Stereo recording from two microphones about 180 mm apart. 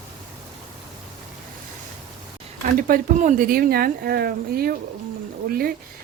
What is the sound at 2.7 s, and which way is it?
Speech, 50° right (ahead or behind).